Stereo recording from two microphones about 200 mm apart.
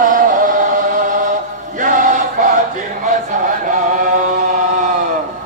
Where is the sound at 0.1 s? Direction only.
40° right (ahead or behind).